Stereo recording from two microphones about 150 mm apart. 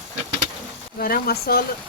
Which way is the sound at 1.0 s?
85° left.